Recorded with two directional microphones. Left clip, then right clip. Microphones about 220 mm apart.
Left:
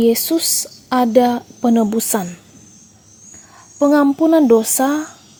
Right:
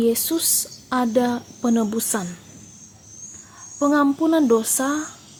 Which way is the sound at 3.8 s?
30° left (ahead or behind).